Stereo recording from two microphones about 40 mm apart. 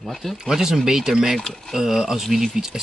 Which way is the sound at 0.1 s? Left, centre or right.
Centre.